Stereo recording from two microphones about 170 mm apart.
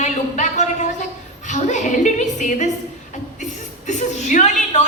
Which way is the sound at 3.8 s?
45° left (ahead or behind).